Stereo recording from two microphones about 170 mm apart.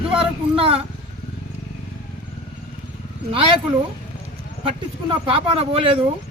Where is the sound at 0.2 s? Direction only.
35° right (ahead or behind).